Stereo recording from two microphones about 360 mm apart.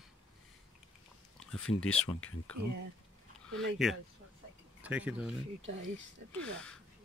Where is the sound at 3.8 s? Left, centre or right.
Centre.